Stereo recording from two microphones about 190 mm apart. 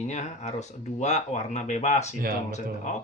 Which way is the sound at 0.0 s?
35° left (ahead or behind).